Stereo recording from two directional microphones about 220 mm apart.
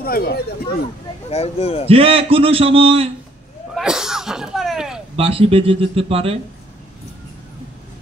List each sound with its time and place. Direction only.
0.0 s speech: 45° left (ahead or behind)
1.3 s speech: 25° left (ahead or behind)
1.9 s a man's voice: 25° right (ahead or behind)
3.7 s speech: centre (ahead or behind)
5.1 s a man's voice: 25° right (ahead or behind)